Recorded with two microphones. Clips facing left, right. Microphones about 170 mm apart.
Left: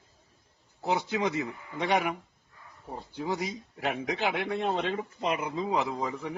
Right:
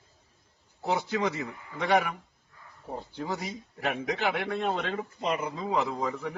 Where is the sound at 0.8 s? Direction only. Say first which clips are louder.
Even; 20° left (ahead or behind).